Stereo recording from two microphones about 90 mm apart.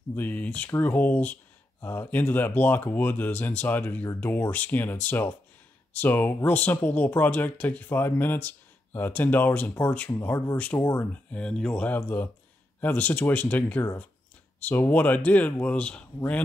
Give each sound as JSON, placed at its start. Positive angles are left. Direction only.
{"t": 0.1, "sound": "speech", "side_deg": 20}
{"t": 11.3, "sound": "speech", "side_deg": 10}